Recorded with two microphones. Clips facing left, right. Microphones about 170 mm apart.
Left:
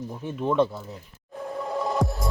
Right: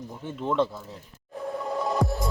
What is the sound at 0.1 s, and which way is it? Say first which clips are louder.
Speech: left 2 dB; 15° left (ahead or behind).